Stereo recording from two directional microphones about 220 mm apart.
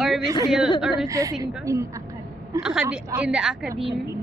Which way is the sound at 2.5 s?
5° right (ahead or behind).